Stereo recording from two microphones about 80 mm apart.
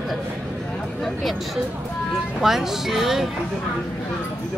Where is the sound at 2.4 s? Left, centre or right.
Centre.